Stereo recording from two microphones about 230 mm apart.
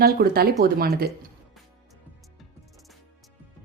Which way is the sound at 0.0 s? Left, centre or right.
Right.